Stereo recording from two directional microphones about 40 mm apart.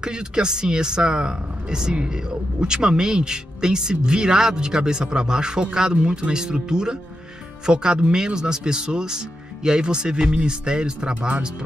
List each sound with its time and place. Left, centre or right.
0.0 s speech: right
6.3 s speech: centre